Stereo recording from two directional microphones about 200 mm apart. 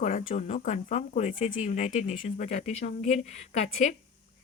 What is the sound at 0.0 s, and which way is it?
Speech, 40° left (ahead or behind).